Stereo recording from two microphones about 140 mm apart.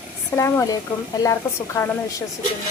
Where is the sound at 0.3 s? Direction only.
20° left (ahead or behind).